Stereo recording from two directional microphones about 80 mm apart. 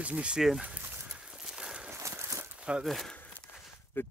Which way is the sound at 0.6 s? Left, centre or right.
Right.